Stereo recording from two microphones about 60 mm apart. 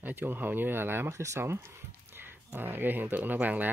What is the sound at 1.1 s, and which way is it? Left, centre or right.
Speech, right.